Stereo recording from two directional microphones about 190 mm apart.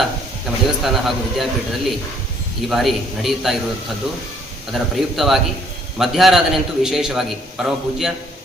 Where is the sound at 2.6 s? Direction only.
Centre (ahead or behind).